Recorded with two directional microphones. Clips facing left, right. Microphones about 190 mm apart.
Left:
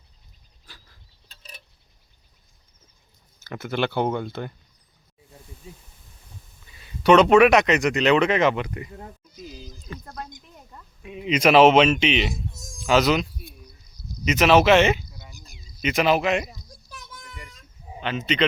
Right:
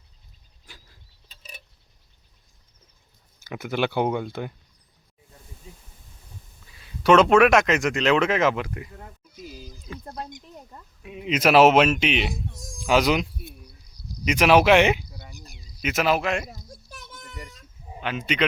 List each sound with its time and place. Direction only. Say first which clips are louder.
1.3 s tick-tock: even; 5° right (ahead or behind)
3.4 s speech: even; 10° right (ahead or behind)
6.7 s speech: left 1 dB; centre (ahead or behind)
9.4 s a sound: even; 5° right (ahead or behind)
10.0 s a sound: right 3 dB; 30° right (ahead or behind)
11.0 s speech: left 2 dB; centre (ahead or behind)
12.8 s a sound: left 1 dB; 10° right (ahead or behind)
14.3 s speech: left 1 dB; 10° right (ahead or behind)
16.6 s children playing: right 1 dB; 25° right (ahead or behind)
18.0 s speech: left 2 dB; 10° right (ahead or behind)